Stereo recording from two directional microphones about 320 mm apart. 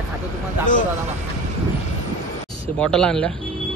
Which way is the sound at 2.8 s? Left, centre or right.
Centre.